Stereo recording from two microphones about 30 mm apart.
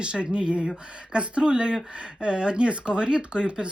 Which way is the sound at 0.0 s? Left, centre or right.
Right.